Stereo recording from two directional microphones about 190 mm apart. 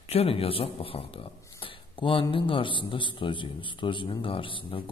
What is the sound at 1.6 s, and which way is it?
A man's voice, 25° left (ahead or behind).